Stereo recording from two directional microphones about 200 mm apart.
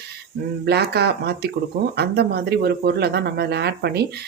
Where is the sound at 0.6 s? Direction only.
55° right (ahead or behind).